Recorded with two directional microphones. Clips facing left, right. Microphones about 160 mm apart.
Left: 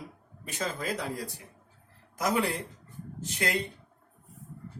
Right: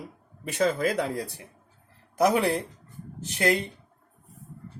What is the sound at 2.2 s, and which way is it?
Speech, 65° right (ahead or behind).